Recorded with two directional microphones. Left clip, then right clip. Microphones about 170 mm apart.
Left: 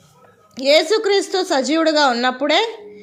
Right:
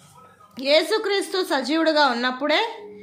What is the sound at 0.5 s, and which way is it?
A woman's voice, 25° left (ahead or behind).